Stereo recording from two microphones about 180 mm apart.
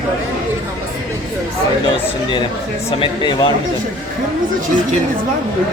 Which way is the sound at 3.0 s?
25° left (ahead or behind).